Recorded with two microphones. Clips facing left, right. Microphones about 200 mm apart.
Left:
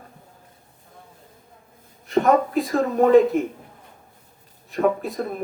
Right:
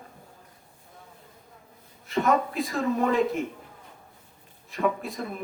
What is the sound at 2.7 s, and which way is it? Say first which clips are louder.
Speech: left 9 dB; 35° left (ahead or behind).